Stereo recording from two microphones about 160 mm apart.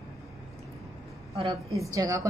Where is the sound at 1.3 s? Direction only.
30° right (ahead or behind).